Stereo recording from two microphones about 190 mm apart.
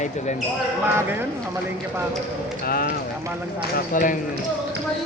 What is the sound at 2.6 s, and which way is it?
Speech, 50° left (ahead or behind).